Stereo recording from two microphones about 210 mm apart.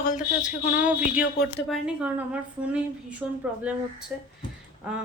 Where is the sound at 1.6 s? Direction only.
Centre (ahead or behind).